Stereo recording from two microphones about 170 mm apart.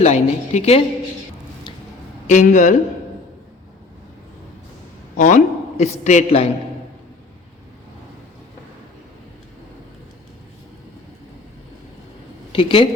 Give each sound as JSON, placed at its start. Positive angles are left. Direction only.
{"t": 0.0, "sound": "a woman's voice", "side_deg": 40}
{"t": 2.2, "sound": "speech", "side_deg": 45}
{"t": 5.1, "sound": "a man's voice", "side_deg": 45}
{"t": 12.5, "sound": "speech", "side_deg": 30}